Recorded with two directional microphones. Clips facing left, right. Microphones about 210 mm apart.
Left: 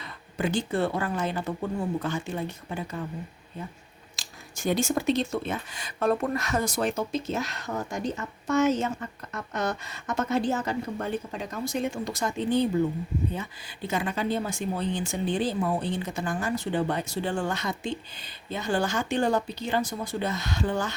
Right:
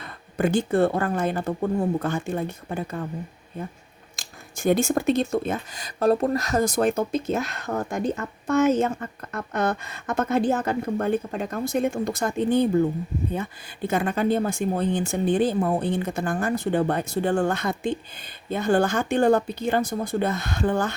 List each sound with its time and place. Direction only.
0.0 s speech: 55° right (ahead or behind)
4.2 s speech: 55° right (ahead or behind)